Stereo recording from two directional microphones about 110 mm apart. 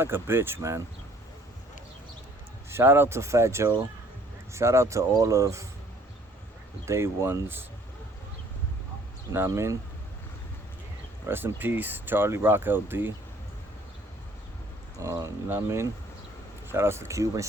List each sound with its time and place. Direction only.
0.0 s speech: 20° right (ahead or behind)
2.6 s speech: 20° right (ahead or behind)
6.8 s speech: 25° right (ahead or behind)
9.3 s speech: 25° right (ahead or behind)
11.3 s speech: 20° right (ahead or behind)
15.0 s speech: 30° right (ahead or behind)